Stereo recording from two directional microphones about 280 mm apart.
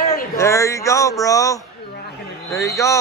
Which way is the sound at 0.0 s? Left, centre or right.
Left.